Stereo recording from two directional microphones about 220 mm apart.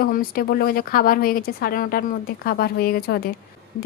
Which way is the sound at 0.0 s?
40° left (ahead or behind).